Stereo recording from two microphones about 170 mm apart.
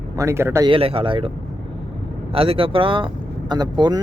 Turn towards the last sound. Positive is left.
turn(degrees=-25)  # may be behind; listen again after turning